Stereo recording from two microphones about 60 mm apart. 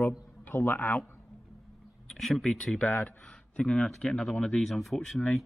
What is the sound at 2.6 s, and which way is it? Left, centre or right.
A man's voice, centre.